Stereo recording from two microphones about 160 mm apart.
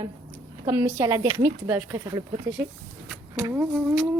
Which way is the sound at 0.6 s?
20° right (ahead or behind).